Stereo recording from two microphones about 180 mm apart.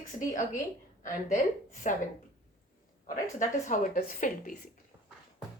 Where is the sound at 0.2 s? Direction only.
45° left (ahead or behind).